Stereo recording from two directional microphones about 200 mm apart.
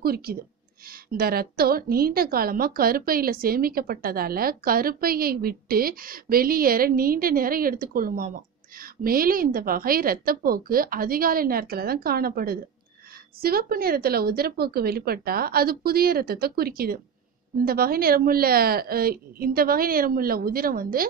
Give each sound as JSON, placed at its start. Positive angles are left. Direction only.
{"t": 0.0, "sound": "a woman's voice", "side_deg": -50}